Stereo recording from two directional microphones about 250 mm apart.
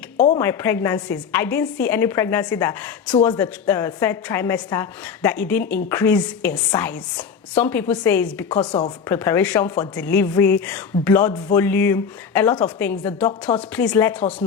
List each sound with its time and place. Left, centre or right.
0.3 s a woman's voice: centre
8.5 s a woman's voice: left; by 14.2 s centre